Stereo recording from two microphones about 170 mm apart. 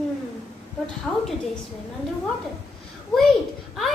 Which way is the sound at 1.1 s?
10° left (ahead or behind).